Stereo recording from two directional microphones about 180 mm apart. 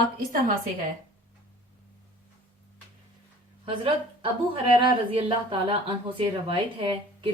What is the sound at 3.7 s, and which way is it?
A woman's voice, 30° right (ahead or behind).